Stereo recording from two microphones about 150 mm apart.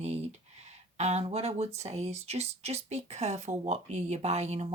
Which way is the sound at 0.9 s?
45° right (ahead or behind).